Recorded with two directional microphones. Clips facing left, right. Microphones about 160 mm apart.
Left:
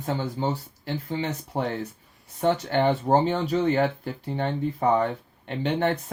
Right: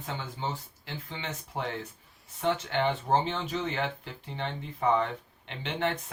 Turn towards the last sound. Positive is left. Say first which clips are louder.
# left 7 dB
turn(degrees=40)  # may be behind; listen again after turning